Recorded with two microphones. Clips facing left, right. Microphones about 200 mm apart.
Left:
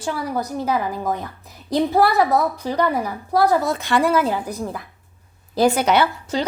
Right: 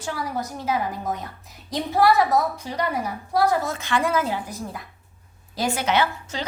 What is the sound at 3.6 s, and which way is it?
Speech, 35° left (ahead or behind).